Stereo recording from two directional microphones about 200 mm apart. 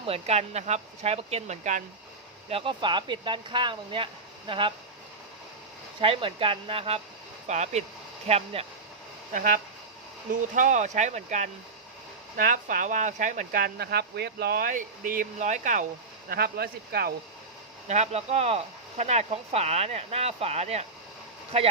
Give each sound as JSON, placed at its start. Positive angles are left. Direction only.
{"t": 0.0, "sound": "speech", "side_deg": -30}
{"t": 6.0, "sound": "speech", "side_deg": -25}
{"t": 9.3, "sound": "speech", "side_deg": -40}
{"t": 16.3, "sound": "speech", "side_deg": -50}
{"t": 17.8, "sound": "speech", "side_deg": -35}